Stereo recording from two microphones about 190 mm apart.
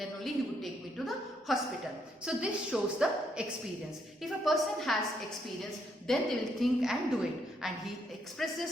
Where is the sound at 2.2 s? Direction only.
5° right (ahead or behind).